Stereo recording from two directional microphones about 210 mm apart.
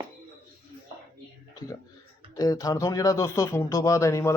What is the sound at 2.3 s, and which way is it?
A man's voice, 15° left (ahead or behind).